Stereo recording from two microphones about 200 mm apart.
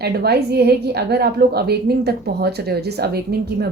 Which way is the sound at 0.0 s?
55° right (ahead or behind).